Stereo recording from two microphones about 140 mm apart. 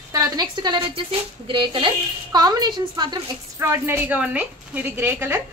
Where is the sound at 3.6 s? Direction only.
15° right (ahead or behind).